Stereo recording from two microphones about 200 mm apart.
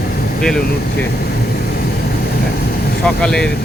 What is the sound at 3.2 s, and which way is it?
Speech, 5° left (ahead or behind).